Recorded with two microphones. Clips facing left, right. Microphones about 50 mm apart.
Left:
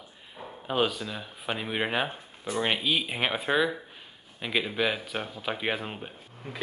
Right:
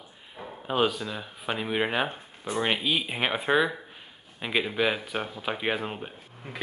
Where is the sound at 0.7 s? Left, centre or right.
Centre.